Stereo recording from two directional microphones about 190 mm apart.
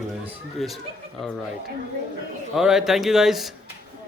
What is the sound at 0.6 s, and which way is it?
Speech, centre (ahead or behind).